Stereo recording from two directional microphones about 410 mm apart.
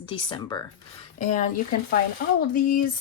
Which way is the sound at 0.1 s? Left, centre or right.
Centre.